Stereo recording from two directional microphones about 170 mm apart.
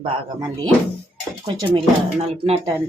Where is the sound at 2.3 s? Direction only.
30° right (ahead or behind).